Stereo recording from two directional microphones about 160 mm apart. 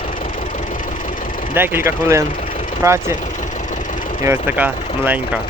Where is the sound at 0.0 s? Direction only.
55° left (ahead or behind).